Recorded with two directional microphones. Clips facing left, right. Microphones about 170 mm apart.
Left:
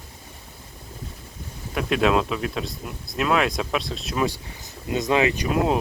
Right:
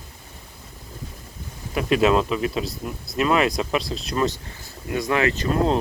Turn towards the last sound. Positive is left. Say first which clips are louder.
# right 1 dB
turn(degrees=10)  # may be behind; listen again after turning